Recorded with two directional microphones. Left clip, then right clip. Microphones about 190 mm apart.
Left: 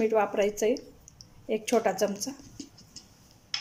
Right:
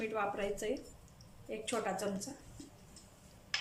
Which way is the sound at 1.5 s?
40° left (ahead or behind).